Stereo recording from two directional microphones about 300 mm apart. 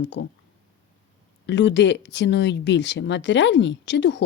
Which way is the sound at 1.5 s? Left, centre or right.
Left.